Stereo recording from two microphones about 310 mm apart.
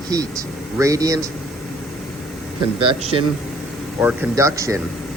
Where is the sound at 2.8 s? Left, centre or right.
Centre.